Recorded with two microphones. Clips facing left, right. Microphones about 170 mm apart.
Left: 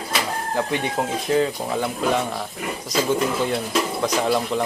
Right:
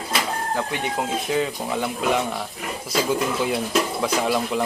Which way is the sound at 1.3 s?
Centre (ahead or behind).